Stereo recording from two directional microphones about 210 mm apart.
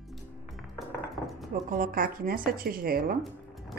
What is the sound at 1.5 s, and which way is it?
Speech, 40° right (ahead or behind).